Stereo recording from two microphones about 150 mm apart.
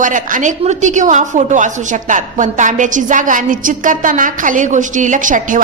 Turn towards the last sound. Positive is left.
turn(degrees=-60)  # may be behind; listen again after turning